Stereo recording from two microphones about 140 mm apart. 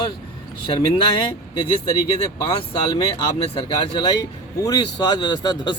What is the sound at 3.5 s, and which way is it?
Speech, 35° left (ahead or behind).